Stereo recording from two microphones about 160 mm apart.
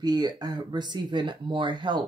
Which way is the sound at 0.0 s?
25° right (ahead or behind).